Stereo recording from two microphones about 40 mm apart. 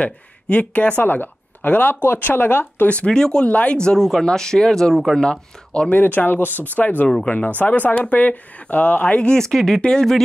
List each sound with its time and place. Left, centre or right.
0.0 s speech: left
1.0 s speech: left
2.0 s speech: left
3.1 s speech: centre
3.4 s speech: left; by 5.4 s centre
5.9 s speech: left
9.0 s speech: left
9.4 s speech: centre
9.8 s speech: centre